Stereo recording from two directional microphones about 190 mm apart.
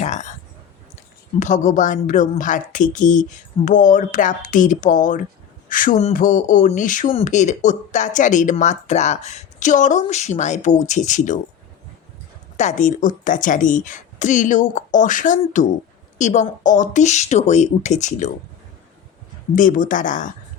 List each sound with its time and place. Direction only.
0.0 s a sound: 40° left (ahead or behind)
1.4 s a woman's voice: 40° left (ahead or behind)
12.5 s a woman's voice: 40° left (ahead or behind)
19.5 s a woman's voice: 45° left (ahead or behind)